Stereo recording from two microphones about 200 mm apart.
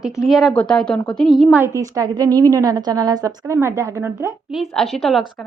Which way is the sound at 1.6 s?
15° right (ahead or behind).